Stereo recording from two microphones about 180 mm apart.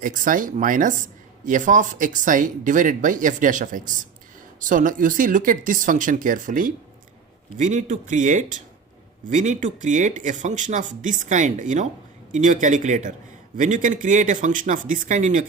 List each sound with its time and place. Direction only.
0.0 s speech: 50° right (ahead or behind)